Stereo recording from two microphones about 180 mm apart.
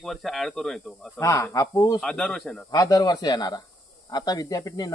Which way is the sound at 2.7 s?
20° left (ahead or behind).